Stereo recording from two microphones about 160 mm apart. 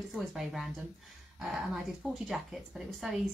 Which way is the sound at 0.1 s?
Centre (ahead or behind).